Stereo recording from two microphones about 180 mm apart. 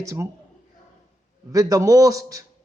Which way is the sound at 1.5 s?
20° right (ahead or behind).